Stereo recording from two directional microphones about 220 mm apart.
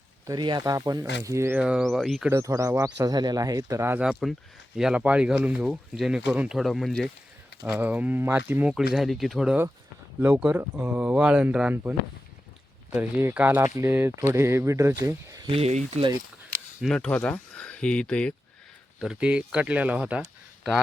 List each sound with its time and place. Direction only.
0.3 s speech: 20° right (ahead or behind); by 2.3 s centre (ahead or behind)
2.3 s speech: 15° right (ahead or behind)
7.6 s speech: 10° right (ahead or behind); by 16.1 s 25° right (ahead or behind)
16.8 s speech: 5° left (ahead or behind)